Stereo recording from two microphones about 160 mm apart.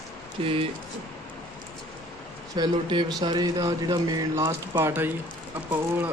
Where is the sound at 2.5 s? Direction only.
30° right (ahead or behind).